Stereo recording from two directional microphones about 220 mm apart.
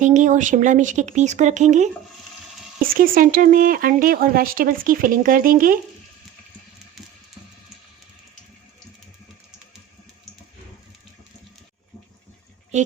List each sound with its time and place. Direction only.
0.0 s speech: 35° right (ahead or behind)